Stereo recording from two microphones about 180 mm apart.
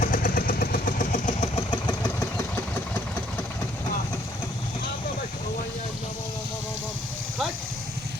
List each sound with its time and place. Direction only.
0.0 s vehicle: 55° left (ahead or behind)
1.3 s vehicle: 35° left (ahead or behind)